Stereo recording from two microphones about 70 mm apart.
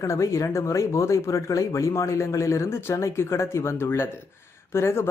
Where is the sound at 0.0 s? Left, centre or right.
Left.